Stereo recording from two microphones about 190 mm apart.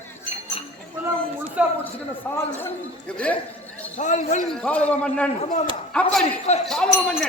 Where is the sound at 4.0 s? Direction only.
40° left (ahead or behind).